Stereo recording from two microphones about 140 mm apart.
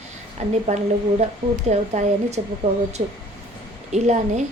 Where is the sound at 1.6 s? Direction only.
55° right (ahead or behind).